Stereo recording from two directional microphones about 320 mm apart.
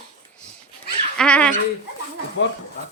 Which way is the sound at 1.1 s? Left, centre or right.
Centre.